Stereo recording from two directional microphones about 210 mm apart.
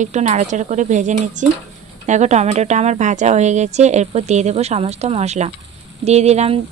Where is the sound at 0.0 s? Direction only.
35° right (ahead or behind).